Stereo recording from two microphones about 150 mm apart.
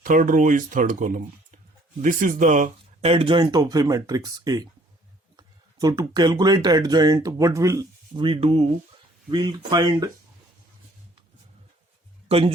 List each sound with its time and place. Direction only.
0.0 s speech: 60° right (ahead or behind); by 8.6 s 40° right (ahead or behind)
9.3 s speech: 30° right (ahead or behind)
12.3 s speech: 40° right (ahead or behind)